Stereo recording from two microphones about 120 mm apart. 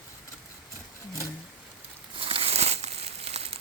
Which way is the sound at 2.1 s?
50° right (ahead or behind).